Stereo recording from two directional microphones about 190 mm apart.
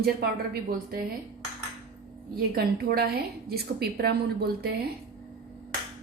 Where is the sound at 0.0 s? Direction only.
55° right (ahead or behind).